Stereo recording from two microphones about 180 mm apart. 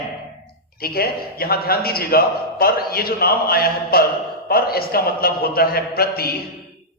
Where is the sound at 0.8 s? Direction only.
60° left (ahead or behind).